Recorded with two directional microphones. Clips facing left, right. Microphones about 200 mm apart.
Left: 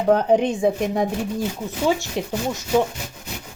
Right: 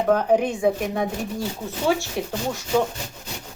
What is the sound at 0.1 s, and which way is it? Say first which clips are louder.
Speech: left 3 dB; 25° left (ahead or behind).